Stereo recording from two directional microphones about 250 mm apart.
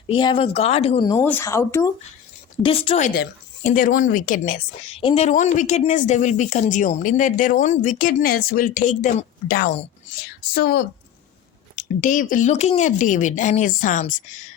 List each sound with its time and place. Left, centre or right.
0.1 s a woman's voice: centre